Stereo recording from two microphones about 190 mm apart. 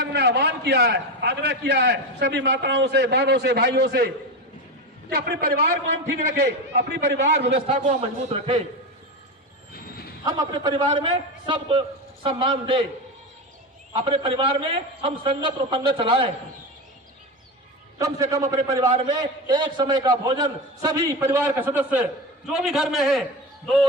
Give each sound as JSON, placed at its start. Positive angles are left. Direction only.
{"t": 0.0, "sound": "a man's voice", "side_deg": -65}
{"t": 5.1, "sound": "a man's voice", "side_deg": -55}
{"t": 7.7, "sound": "speech", "side_deg": -35}
{"t": 10.2, "sound": "a man's voice", "side_deg": -20}
{"t": 13.9, "sound": "a man's voice", "side_deg": -30}
{"t": 18.0, "sound": "a man's voice", "side_deg": -15}